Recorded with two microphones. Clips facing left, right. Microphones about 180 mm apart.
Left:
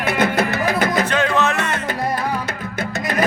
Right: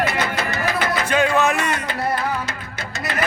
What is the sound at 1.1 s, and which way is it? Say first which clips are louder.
Music: right 1 dB; 10° right (ahead or behind).